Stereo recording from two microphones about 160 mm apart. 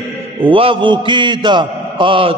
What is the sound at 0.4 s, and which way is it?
A man's voice, 35° right (ahead or behind).